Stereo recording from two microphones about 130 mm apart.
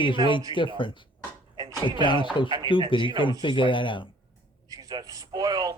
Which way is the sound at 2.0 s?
40° left (ahead or behind).